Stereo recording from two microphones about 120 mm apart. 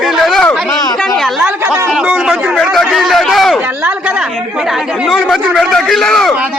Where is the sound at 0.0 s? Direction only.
Centre (ahead or behind).